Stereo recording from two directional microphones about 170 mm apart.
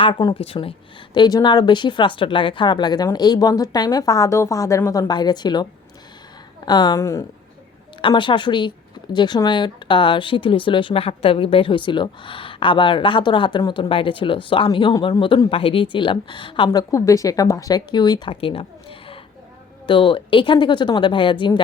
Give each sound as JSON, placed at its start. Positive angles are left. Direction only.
{"t": 0.0, "sound": "speech", "side_deg": 25}
{"t": 6.7, "sound": "speech", "side_deg": 25}
{"t": 8.0, "sound": "speech", "side_deg": 30}